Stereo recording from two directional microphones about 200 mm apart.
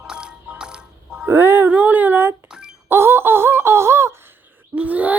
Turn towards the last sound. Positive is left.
turn(degrees=-5)  # may be behind; listen again after turning